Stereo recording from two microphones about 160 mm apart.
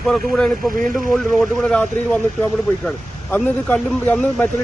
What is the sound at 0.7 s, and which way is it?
Speech, 55° right (ahead or behind).